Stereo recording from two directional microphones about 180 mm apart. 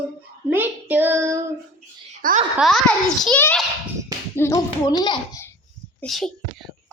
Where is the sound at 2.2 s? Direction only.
50° right (ahead or behind).